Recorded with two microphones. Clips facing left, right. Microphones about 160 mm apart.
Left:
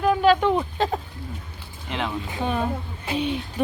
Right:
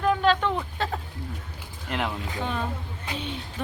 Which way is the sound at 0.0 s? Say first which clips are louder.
Left 4 dB; 10° left (ahead or behind).